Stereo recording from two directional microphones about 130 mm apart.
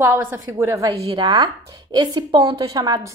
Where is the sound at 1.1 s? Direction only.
35° right (ahead or behind).